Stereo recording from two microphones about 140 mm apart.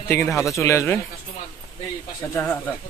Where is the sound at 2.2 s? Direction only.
20° left (ahead or behind).